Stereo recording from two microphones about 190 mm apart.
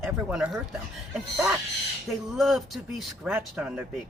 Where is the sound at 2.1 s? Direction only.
Centre (ahead or behind).